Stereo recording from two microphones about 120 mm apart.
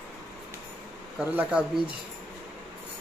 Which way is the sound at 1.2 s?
15° right (ahead or behind).